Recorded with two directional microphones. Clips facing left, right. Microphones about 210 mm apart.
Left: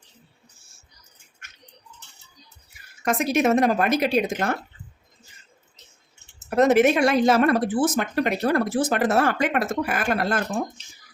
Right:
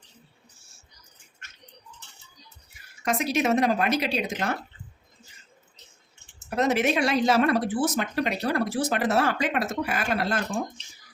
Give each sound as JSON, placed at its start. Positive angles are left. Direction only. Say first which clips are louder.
{"t": 3.0, "sound": "speech", "louder": "left 4 dB", "side_deg": 50}
{"t": 6.6, "sound": "speech", "louder": "left 6 dB", "side_deg": 50}